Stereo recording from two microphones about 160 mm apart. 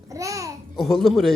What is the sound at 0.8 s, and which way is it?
Speech, centre (ahead or behind).